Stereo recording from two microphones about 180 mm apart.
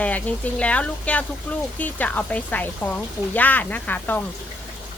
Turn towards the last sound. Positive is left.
turn(degrees=10)  # may be behind; listen again after turning